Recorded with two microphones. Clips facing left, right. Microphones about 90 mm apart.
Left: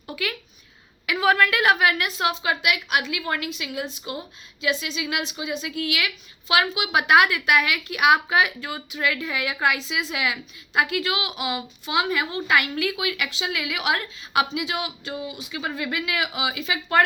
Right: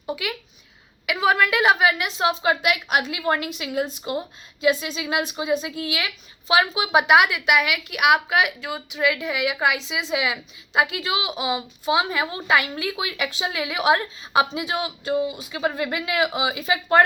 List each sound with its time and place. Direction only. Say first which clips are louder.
0.0 s a woman's voice: right 2 dB; 15° right (ahead or behind); by 2.6 s 30° right (ahead or behind)
2.6 s a woman's voice: right 2 dB; 40° right (ahead or behind)
7.1 s a woman's voice: left 1 dB; 15° right (ahead or behind)
9.8 s a woman's voice: right 2 dB; 20° right (ahead or behind)